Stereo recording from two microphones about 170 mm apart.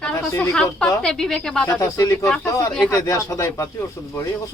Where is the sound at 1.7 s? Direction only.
20° left (ahead or behind).